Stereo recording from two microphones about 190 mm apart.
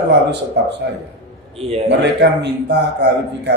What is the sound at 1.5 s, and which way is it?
Speech, 30° right (ahead or behind).